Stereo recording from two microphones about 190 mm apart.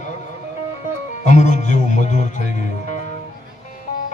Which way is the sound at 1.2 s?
40° left (ahead or behind).